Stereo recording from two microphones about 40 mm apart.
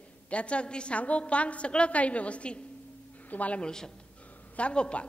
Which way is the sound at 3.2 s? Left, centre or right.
Left.